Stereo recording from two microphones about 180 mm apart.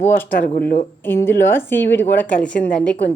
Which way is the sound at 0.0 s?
10° left (ahead or behind).